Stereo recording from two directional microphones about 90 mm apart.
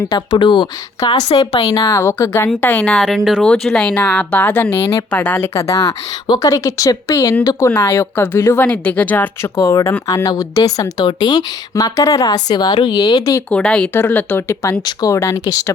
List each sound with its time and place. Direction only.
0.1 s speech: 60° left (ahead or behind)
1.9 s speech: 35° left (ahead or behind)
2.6 s speech: 20° left (ahead or behind)
2.9 s speech: centre (ahead or behind); by 5.5 s 20° left (ahead or behind)
5.5 s speech: 35° left (ahead or behind)
6.2 s speech: 50° left (ahead or behind)
6.5 s speech: 40° left (ahead or behind); by 9.5 s 20° left (ahead or behind)
9.6 s speech: 30° left (ahead or behind)
11.0 s speech: 55° left (ahead or behind)
11.7 s speech: 40° left (ahead or behind)
13.5 s speech: 10° left (ahead or behind)
13.9 s speech: 20° left (ahead or behind)